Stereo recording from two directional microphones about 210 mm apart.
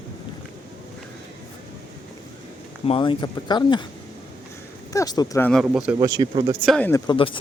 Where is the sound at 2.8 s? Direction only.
25° left (ahead or behind).